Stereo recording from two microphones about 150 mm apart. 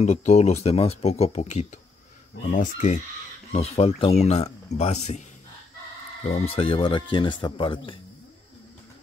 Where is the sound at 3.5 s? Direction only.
45° left (ahead or behind).